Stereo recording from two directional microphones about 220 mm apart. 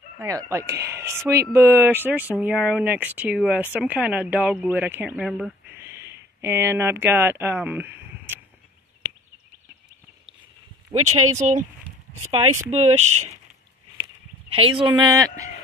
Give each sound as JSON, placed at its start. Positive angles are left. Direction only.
{"t": 0.2, "sound": "speech", "side_deg": -15}
{"t": 10.9, "sound": "speech", "side_deg": -25}
{"t": 14.5, "sound": "speech", "side_deg": -25}